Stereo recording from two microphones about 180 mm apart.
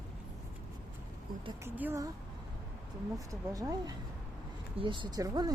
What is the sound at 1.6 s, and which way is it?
Speech, 10° right (ahead or behind).